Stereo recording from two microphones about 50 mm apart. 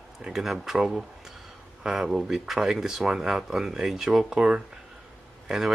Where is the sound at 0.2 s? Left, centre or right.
Centre.